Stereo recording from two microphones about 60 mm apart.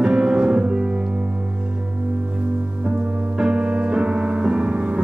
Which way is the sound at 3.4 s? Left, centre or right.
Centre.